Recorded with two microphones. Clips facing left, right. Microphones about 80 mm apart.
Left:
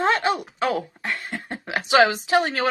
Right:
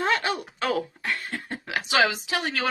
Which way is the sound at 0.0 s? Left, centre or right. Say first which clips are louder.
Left 4 dB; left.